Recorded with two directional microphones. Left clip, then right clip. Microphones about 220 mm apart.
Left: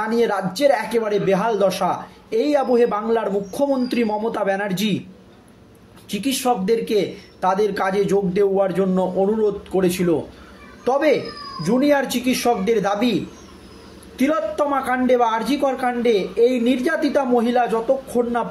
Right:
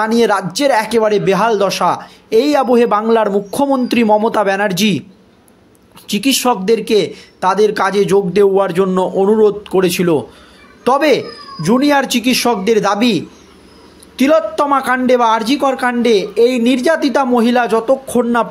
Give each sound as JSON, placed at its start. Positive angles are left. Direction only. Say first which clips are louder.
{"t": 0.0, "sound": "a man's voice", "louder": "right 7 dB", "side_deg": -45}
{"t": 6.0, "sound": "a man's voice", "louder": "right 7 dB", "side_deg": -45}